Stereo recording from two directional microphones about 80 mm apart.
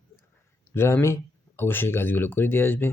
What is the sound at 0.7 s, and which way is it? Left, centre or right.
Speech, left.